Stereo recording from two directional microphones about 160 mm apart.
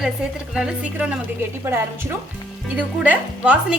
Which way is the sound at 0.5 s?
5° right (ahead or behind).